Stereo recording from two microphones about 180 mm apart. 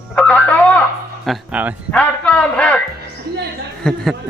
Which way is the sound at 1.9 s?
5° left (ahead or behind).